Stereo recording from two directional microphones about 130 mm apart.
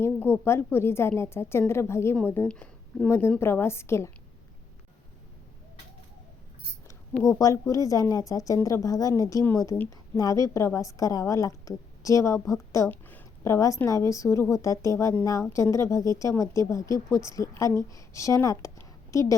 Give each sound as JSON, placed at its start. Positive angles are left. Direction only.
{"t": 0.0, "sound": "a woman's voice", "side_deg": 20}
{"t": 7.2, "sound": "a woman's voice", "side_deg": 25}
{"t": 12.9, "sound": "a woman's voice", "side_deg": 15}